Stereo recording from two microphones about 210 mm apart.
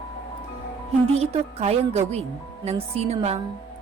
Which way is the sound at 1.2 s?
30° right (ahead or behind).